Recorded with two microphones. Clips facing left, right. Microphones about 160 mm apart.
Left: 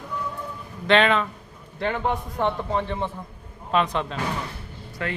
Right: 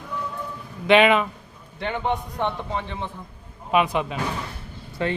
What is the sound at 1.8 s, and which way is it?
A man's voice, centre (ahead or behind).